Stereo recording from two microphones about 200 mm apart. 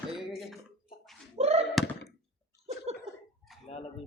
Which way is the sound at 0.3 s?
Centre (ahead or behind).